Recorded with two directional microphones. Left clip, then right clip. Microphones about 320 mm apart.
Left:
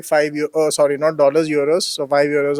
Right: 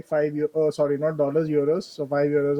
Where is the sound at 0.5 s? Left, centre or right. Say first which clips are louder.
Left 9 dB; centre.